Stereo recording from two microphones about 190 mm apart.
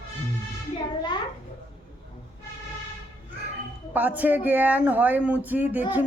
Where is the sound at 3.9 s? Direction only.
10° right (ahead or behind).